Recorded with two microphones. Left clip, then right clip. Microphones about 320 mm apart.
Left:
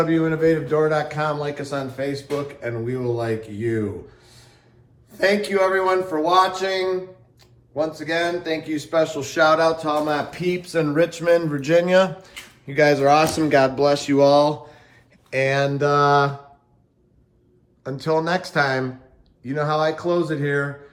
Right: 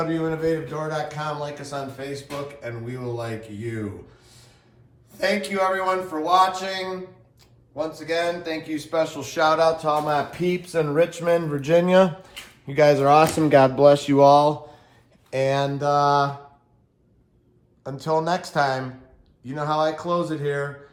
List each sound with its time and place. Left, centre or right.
0.0 s a man's voice: centre
5.1 s a man's voice: centre
17.8 s a man's voice: centre